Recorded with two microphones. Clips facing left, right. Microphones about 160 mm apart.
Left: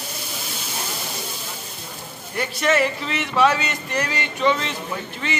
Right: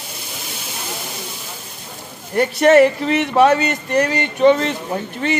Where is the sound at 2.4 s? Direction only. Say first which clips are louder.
Right 9 dB; 55° right (ahead or behind).